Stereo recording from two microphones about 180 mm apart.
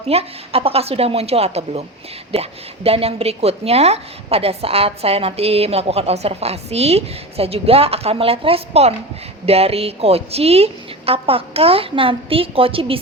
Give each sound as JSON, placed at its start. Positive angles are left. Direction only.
{"t": 0.1, "sound": "a woman's voice", "side_deg": -35}